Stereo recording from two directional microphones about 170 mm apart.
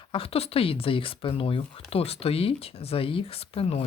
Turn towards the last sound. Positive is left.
turn(degrees=35)  # may be behind; listen again after turning